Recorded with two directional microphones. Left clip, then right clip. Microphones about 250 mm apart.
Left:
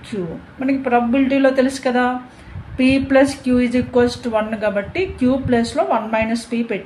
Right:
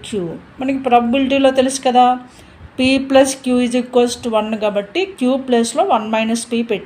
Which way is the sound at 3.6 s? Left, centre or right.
Right.